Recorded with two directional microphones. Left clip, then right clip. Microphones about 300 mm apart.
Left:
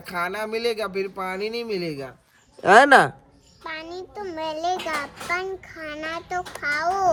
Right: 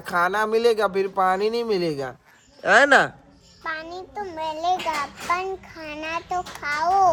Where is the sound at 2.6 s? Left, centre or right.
Centre.